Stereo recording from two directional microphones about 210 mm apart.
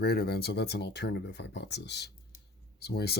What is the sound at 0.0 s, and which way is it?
Speech, 50° left (ahead or behind).